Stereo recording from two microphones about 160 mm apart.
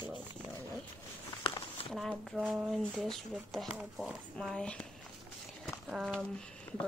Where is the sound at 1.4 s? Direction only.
30° left (ahead or behind).